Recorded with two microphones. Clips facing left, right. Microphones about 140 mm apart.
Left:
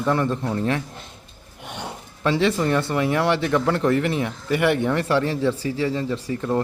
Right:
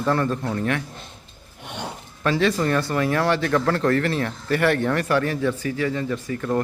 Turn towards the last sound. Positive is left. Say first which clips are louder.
# left 1 dB
turn(degrees=30)  # may be behind; listen again after turning